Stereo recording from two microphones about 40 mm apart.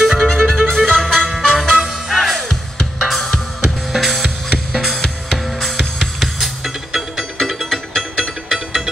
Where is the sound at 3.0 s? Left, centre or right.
Centre.